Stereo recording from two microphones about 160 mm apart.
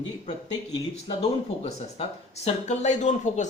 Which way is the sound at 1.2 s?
40° left (ahead or behind).